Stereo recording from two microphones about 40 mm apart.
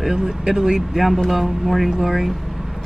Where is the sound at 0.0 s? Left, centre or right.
Centre.